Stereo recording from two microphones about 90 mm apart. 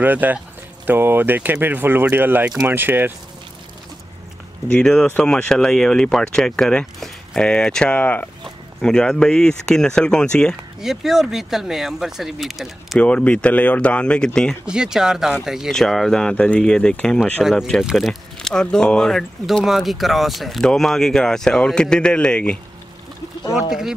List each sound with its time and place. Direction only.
0.0 s speech: 20° right (ahead or behind)
4.7 s speech: 10° left (ahead or behind)
10.8 s speech: 5° right (ahead or behind)
13.0 s speech: 15° left (ahead or behind)
14.7 s speech: 5° right (ahead or behind); by 17.2 s 10° left (ahead or behind)
17.2 s speech: 5° right (ahead or behind)